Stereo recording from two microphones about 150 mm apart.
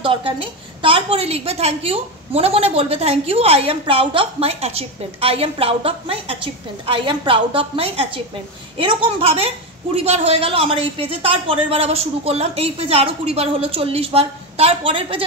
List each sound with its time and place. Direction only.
0.0 s a woman's voice: 35° right (ahead or behind)